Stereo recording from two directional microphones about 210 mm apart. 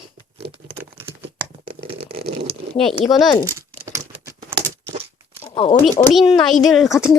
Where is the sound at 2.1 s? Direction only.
45° right (ahead or behind).